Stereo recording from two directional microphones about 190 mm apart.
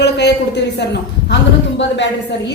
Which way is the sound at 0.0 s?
65° left (ahead or behind).